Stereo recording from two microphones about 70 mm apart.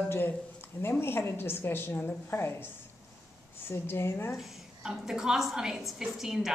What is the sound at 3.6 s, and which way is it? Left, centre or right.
Speech, left.